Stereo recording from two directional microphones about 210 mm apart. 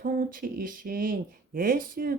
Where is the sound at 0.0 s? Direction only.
40° right (ahead or behind).